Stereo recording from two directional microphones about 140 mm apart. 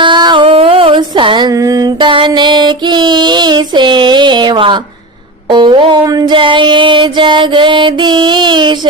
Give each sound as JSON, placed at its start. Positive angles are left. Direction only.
{"t": 0.0, "sound": "music", "side_deg": -35}